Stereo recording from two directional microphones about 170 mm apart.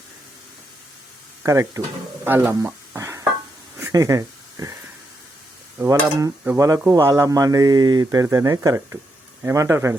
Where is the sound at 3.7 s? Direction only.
20° right (ahead or behind).